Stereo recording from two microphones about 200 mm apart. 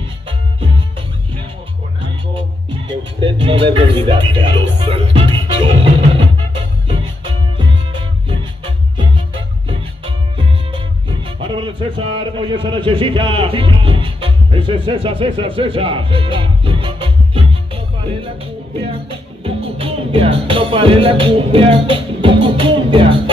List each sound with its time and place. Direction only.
2.9 s speech: 25° right (ahead or behind)
6.9 s music: 25° right (ahead or behind)